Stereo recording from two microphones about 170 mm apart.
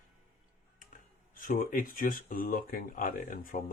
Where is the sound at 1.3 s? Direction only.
55° left (ahead or behind).